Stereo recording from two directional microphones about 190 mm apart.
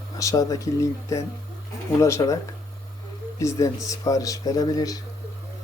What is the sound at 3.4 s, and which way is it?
Speech, 15° left (ahead or behind).